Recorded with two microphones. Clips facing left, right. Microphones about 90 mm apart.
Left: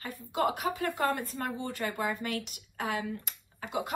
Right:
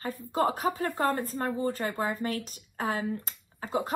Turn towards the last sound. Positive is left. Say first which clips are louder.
# right 4 dB
turn(degrees=-35)  # may be behind; listen again after turning